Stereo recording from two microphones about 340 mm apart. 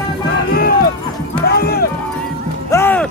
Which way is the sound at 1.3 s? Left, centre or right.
Left.